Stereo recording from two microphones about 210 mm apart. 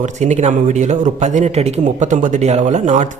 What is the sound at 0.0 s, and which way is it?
A man's voice, 35° right (ahead or behind).